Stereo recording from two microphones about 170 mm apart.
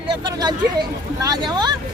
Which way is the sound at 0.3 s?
25° right (ahead or behind).